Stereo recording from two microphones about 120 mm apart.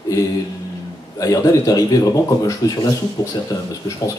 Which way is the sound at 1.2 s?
30° left (ahead or behind).